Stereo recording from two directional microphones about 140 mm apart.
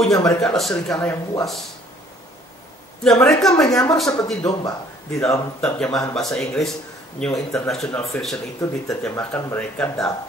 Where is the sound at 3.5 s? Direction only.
25° left (ahead or behind).